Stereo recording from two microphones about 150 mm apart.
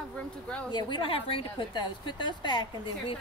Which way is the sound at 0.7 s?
30° left (ahead or behind).